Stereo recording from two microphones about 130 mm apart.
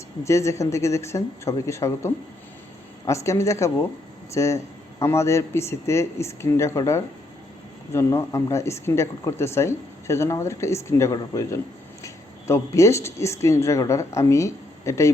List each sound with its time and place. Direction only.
0.3 s speech: 20° left (ahead or behind)